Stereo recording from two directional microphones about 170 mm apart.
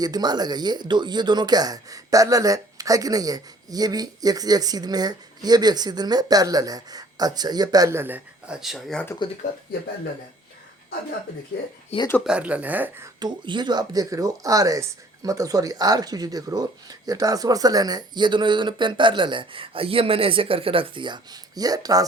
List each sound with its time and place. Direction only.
0.0 s speech: 25° right (ahead or behind); by 9.0 s centre (ahead or behind)
12.2 s speech: 5° right (ahead or behind)
13.1 s speech: 25° right (ahead or behind)